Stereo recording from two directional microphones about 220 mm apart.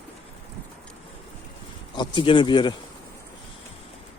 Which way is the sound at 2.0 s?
20° left (ahead or behind).